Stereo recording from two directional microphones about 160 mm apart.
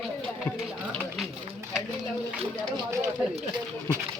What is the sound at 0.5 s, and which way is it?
Music, centre (ahead or behind).